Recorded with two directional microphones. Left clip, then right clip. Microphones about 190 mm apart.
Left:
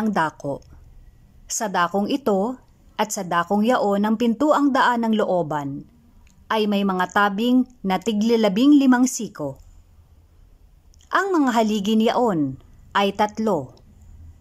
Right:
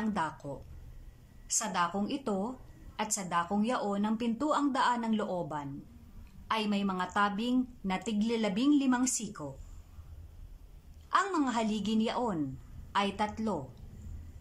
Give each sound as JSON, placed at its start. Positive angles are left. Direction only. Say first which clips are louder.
{"t": 0.0, "sound": "a woman's voice", "louder": "left 12 dB", "side_deg": 50}
{"t": 11.1, "sound": "a woman's voice", "louder": "left 9 dB", "side_deg": 50}